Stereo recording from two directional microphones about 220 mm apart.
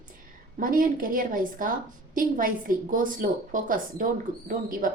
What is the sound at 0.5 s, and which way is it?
A woman's voice, 40° right (ahead or behind).